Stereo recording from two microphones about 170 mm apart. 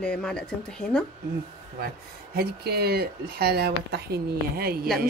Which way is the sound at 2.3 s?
65° right (ahead or behind).